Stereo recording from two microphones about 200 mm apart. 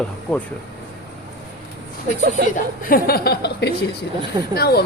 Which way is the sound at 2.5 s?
45° left (ahead or behind).